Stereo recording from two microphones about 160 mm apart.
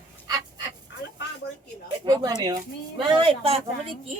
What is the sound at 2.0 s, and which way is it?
Speech, 25° right (ahead or behind).